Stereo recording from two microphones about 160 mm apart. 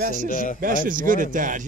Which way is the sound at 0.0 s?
55° right (ahead or behind).